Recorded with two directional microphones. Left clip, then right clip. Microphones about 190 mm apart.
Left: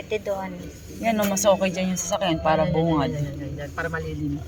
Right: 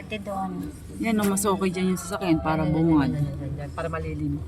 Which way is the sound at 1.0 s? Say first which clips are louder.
Left 5 dB; 10° left (ahead or behind).